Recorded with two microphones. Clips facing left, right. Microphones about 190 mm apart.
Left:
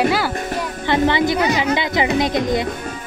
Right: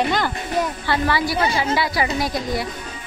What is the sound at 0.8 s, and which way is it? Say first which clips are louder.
Speech: left 5 dB; 20° left (ahead or behind).